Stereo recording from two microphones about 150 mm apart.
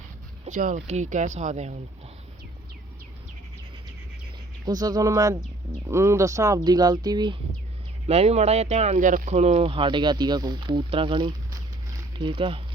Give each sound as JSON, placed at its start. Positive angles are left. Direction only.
{"t": 0.4, "sound": "speech", "side_deg": -55}
{"t": 4.6, "sound": "speech", "side_deg": -25}
{"t": 8.0, "sound": "speech", "side_deg": -45}